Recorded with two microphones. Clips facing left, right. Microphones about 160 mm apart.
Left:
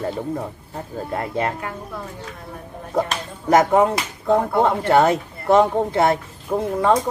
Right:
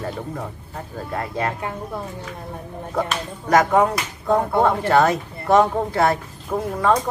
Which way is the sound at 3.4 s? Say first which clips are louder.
Left 1 dB; 25° left (ahead or behind).